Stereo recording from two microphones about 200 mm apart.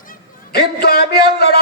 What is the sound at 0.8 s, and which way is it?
Speech, 55° left (ahead or behind).